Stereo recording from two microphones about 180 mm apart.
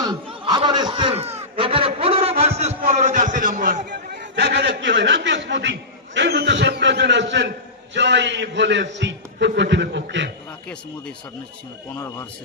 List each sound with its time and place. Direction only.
0.0 s a sound: 25° right (ahead or behind); by 3.8 s 45° right (ahead or behind)
4.4 s a man's voice: 70° right (ahead or behind); by 5.7 s 90° right
6.1 s a man's voice: 70° right (ahead or behind)